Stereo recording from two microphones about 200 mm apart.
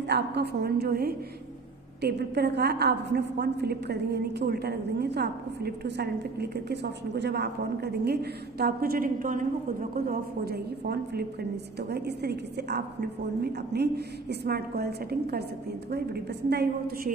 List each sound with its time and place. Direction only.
0.1 s a woman's voice: 55° right (ahead or behind)
16.4 s a woman's voice: 50° right (ahead or behind)